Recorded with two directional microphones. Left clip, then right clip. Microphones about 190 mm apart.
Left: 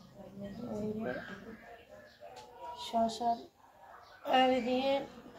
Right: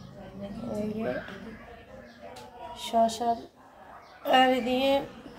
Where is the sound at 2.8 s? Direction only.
15° right (ahead or behind).